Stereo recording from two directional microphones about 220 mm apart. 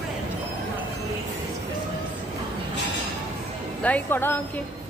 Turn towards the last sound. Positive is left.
turn(degrees=10)  # may be behind; listen again after turning